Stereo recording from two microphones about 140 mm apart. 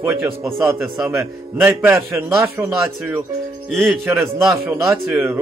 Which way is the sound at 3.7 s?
Centre (ahead or behind).